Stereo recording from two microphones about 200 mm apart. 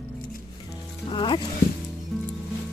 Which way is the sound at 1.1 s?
20° left (ahead or behind).